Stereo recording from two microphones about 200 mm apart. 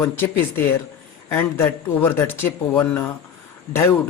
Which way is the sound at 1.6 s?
10° left (ahead or behind).